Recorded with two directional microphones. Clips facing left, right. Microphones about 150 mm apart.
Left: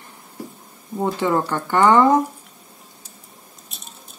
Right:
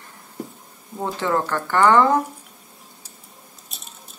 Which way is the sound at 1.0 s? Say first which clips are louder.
Left 3 dB; 15° left (ahead or behind).